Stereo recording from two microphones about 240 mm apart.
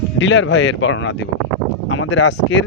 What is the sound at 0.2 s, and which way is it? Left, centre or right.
Speech, left.